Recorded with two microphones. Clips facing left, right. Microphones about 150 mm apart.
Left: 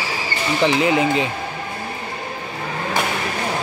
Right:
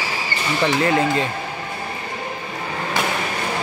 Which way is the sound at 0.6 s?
15° left (ahead or behind).